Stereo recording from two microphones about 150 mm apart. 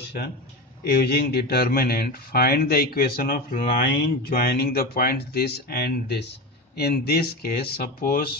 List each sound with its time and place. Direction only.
0.8 s speech: 90° left